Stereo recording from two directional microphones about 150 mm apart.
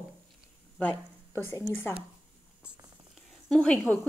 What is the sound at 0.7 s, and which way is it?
Speech, 15° left (ahead or behind).